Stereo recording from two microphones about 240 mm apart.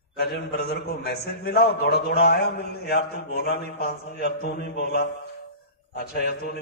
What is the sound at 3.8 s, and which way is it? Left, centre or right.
Speech, left.